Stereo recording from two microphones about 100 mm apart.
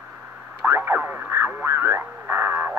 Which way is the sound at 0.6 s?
25° right (ahead or behind).